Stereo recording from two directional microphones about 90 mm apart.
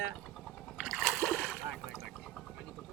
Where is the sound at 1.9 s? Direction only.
Centre (ahead or behind).